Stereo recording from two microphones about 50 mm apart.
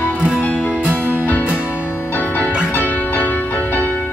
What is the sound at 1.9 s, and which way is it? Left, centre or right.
Music, left.